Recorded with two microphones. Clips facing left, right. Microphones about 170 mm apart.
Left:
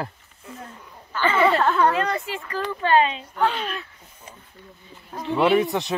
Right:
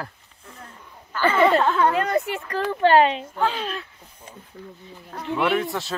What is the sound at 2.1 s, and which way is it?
Speech, 60° right (ahead or behind).